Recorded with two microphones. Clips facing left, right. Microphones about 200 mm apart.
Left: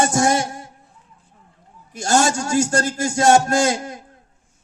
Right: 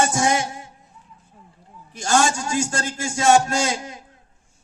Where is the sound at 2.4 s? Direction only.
45° left (ahead or behind).